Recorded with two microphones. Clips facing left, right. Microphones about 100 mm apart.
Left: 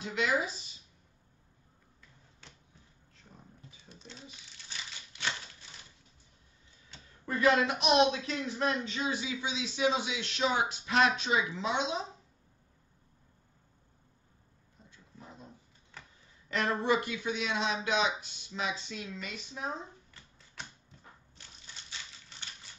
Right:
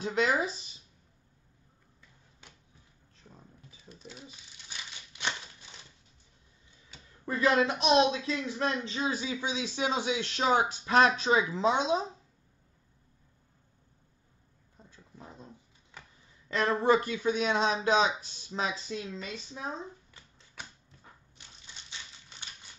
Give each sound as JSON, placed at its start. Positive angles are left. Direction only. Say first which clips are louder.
{"t": 0.0, "sound": "speech", "louder": "right 4 dB", "side_deg": -35}
{"t": 2.4, "sound": "a sound", "louder": "even", "side_deg": -10}
{"t": 4.0, "sound": "crumpling", "louder": "right 2 dB", "side_deg": -10}
{"t": 7.2, "sound": "speech", "louder": "right 1 dB", "side_deg": -25}
{"t": 15.1, "sound": "dog", "louder": "right 3 dB", "side_deg": -15}
{"t": 16.5, "sound": "speech", "louder": "right 4 dB", "side_deg": -35}